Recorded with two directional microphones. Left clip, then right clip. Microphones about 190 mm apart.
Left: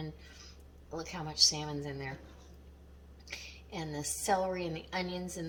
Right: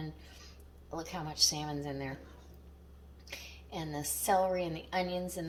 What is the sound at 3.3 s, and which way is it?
A woman's voice, 20° right (ahead or behind).